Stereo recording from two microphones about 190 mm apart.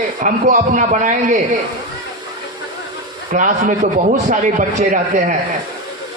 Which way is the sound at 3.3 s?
40° right (ahead or behind).